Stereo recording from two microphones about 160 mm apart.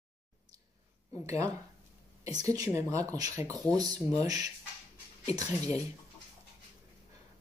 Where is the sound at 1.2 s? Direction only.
20° right (ahead or behind).